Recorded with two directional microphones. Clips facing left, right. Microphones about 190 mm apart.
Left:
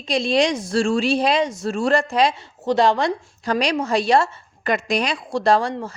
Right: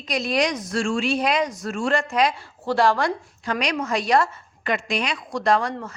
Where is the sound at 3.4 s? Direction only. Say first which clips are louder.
Left 4 dB; 35° left (ahead or behind).